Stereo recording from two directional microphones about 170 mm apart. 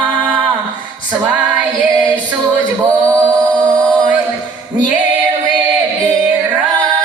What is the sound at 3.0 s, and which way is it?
Music, 20° right (ahead or behind).